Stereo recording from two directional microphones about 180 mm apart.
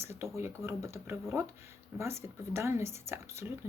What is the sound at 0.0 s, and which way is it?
A woman's voice, 15° right (ahead or behind).